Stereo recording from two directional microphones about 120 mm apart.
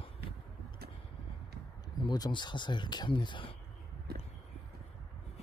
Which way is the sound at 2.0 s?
40° left (ahead or behind).